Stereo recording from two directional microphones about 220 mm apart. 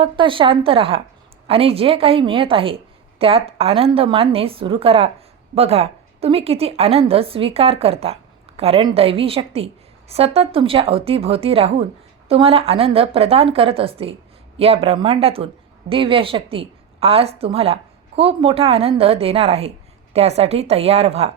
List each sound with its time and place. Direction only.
0.0 s a woman's voice: 25° right (ahead or behind)